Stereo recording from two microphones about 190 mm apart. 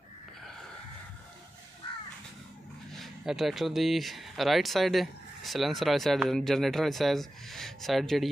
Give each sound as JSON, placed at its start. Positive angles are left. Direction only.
{"t": 3.0, "sound": "speech", "side_deg": 0}